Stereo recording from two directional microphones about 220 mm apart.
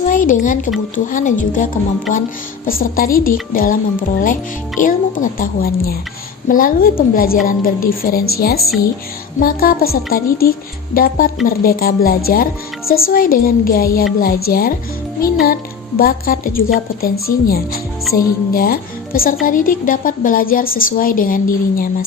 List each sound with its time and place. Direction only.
0.0 s a woman's voice: 35° left (ahead or behind)
16.0 s a woman's voice: 40° left (ahead or behind)